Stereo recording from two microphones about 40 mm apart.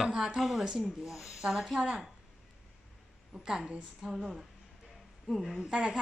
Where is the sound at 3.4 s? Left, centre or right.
Centre.